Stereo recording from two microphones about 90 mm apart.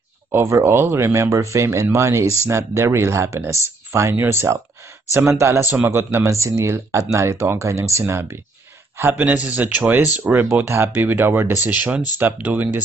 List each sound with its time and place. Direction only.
0.3 s speech: 30° right (ahead or behind)
8.9 s speech: 20° right (ahead or behind)